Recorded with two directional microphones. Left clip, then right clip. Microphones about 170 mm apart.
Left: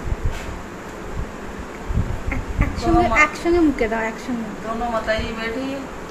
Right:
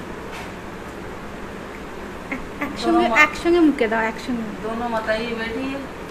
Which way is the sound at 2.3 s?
5° right (ahead or behind).